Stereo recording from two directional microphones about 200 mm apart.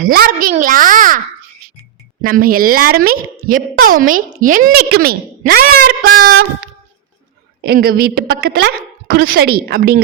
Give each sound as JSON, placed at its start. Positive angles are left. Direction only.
{"t": 0.1, "sound": "a woman's voice", "side_deg": -45}
{"t": 2.2, "sound": "a woman's voice", "side_deg": -45}
{"t": 7.6, "sound": "a woman's voice", "side_deg": -50}